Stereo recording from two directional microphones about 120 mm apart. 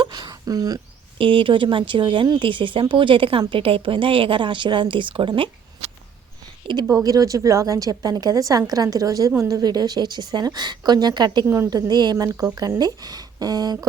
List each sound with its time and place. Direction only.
0.0 s a sound: 40° right (ahead or behind)
1.2 s a woman's voice: 45° right (ahead or behind)
6.8 s a woman's voice: 30° right (ahead or behind)
11.4 s a woman's voice: 20° right (ahead or behind)
11.7 s a woman's voice: 35° right (ahead or behind)